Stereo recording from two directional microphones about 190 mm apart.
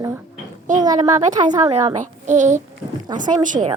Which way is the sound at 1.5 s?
30° right (ahead or behind).